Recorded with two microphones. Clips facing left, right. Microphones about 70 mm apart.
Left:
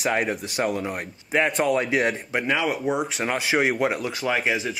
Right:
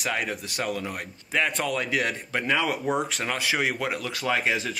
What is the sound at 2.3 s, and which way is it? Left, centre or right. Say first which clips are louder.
Speech: left 2 dB; centre.